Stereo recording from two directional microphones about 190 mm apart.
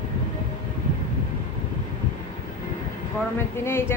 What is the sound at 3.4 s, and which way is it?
Speech, 10° left (ahead or behind).